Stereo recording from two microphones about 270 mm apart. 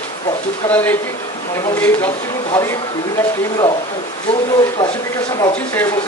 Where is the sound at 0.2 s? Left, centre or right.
Centre.